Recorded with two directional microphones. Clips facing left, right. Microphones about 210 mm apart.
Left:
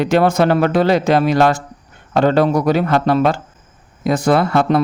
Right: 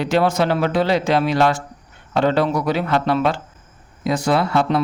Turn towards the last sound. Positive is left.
turn(degrees=50)  # may be behind; listen again after turning